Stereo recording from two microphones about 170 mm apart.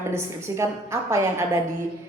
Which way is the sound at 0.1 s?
15° right (ahead or behind).